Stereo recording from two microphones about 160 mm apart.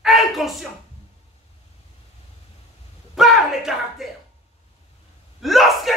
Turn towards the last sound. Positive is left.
turn(degrees=0)  # may be behind; listen again after turning